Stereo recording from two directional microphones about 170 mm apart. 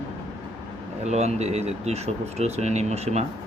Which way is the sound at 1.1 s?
40° right (ahead or behind).